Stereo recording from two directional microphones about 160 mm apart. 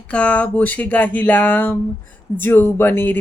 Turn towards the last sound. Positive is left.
turn(degrees=10)  # may be behind; listen again after turning